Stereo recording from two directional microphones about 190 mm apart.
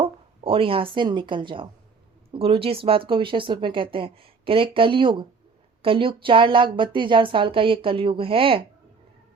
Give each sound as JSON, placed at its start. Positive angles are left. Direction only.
{"t": 0.0, "sound": "speech", "side_deg": -30}